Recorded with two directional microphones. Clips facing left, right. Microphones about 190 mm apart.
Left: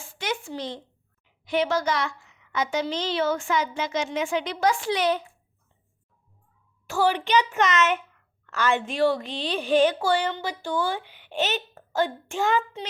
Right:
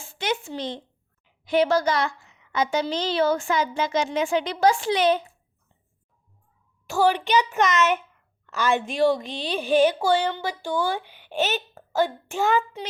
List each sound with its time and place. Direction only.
0.0 s a sound: 25° right (ahead or behind)
1.5 s a woman's voice: 35° right (ahead or behind)
6.8 s a woman's voice: 15° right (ahead or behind)